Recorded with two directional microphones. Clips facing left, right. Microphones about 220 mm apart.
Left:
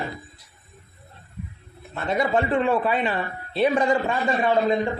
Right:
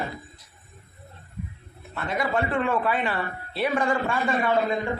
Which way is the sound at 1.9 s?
25° left (ahead or behind).